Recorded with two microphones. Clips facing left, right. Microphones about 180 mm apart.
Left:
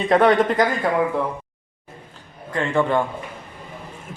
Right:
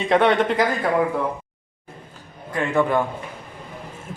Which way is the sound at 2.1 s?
10° right (ahead or behind).